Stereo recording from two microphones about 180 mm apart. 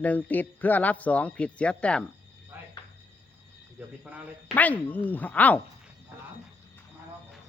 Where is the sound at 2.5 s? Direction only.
10° right (ahead or behind).